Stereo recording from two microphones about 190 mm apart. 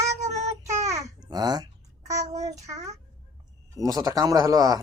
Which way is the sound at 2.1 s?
15° right (ahead or behind).